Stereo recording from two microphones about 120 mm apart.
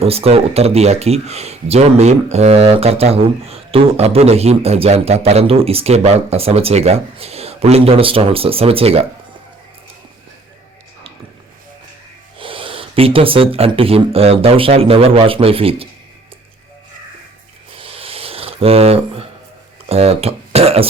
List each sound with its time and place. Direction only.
0.0 s speech: 55° right (ahead or behind)
12.4 s speech: 50° right (ahead or behind)
17.7 s a sound: 50° right (ahead or behind)
19.9 s speech: 55° right (ahead or behind)